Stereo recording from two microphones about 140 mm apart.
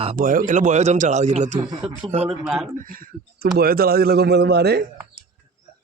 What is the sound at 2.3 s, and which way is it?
Speech, centre (ahead or behind).